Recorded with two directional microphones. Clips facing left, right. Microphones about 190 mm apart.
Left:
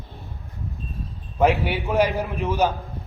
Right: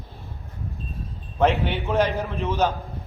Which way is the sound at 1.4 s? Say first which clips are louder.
Left 1 dB; 10° left (ahead or behind).